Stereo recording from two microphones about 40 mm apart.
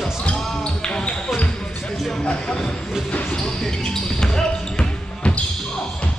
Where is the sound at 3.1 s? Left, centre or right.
Left.